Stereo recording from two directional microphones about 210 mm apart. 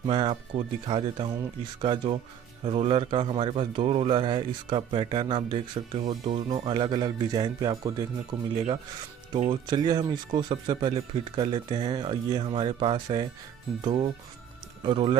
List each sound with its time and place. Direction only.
0.0 s a man's voice: 25° right (ahead or behind)